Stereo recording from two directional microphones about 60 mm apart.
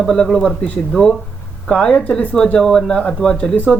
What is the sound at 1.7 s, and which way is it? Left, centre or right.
Speech, centre.